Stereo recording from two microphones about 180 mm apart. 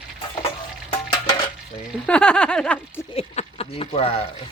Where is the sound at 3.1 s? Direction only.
35° left (ahead or behind).